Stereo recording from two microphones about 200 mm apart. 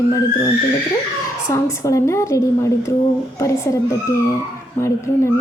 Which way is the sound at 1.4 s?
15° left (ahead or behind).